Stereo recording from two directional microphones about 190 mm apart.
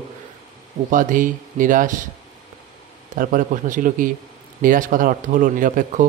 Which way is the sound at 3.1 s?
45° right (ahead or behind).